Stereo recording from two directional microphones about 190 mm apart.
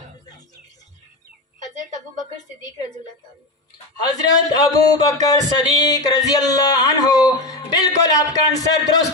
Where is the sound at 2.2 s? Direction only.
20° left (ahead or behind).